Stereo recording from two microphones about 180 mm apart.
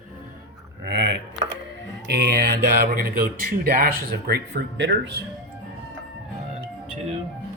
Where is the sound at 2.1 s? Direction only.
65° right (ahead or behind).